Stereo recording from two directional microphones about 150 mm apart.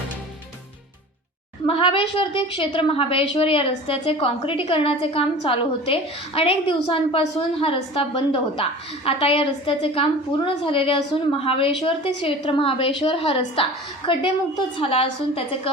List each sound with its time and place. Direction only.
1.6 s a woman's voice: 35° left (ahead or behind)